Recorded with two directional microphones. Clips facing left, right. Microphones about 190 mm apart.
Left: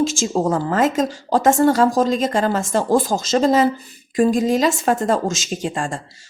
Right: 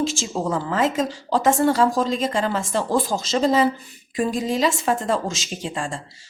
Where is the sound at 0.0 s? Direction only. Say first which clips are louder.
Left 5 dB; 45° left (ahead or behind).